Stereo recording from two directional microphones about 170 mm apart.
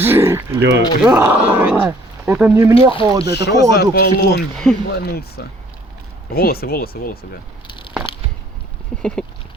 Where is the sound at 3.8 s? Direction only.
65° left (ahead or behind).